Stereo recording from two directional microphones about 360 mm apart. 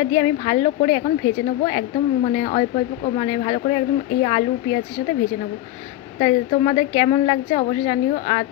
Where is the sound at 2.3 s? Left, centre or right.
Centre.